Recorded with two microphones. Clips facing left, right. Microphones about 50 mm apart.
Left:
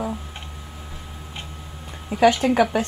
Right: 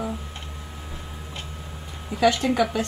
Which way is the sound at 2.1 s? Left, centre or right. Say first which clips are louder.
Left 3 dB; centre.